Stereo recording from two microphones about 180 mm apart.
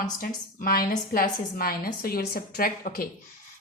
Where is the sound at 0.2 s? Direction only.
55° left (ahead or behind).